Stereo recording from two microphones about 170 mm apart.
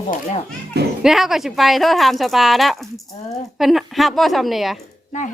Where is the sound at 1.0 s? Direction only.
Centre (ahead or behind).